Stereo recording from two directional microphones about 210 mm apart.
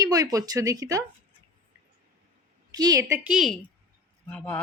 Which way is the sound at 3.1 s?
5° right (ahead or behind).